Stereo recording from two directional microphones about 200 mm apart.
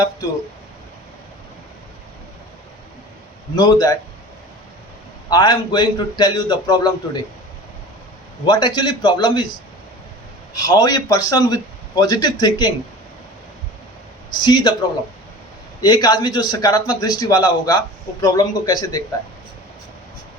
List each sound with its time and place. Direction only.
3.5 s a man's voice: 20° left (ahead or behind)
5.3 s a man's voice: 20° left (ahead or behind)
8.4 s a man's voice: 25° left (ahead or behind)
10.5 s a man's voice: 20° left (ahead or behind)
14.4 s a man's voice: 20° left (ahead or behind)
15.8 s a man's voice: 20° left (ahead or behind)